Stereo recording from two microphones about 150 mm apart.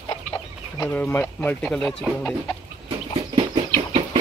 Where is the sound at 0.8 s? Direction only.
15° left (ahead or behind).